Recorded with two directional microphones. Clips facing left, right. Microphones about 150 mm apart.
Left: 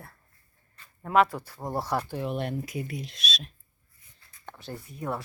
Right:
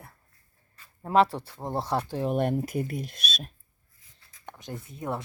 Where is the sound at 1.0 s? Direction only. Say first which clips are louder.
Right 1 dB; 30° right (ahead or behind).